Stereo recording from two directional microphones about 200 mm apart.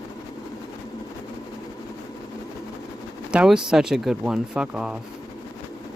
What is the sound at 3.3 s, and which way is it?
Speech, 5° right (ahead or behind).